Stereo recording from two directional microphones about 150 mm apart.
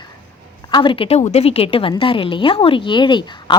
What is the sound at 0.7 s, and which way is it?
Speech, 35° left (ahead or behind).